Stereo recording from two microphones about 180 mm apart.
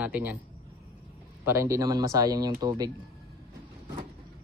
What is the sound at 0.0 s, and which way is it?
Speech, 10° right (ahead or behind).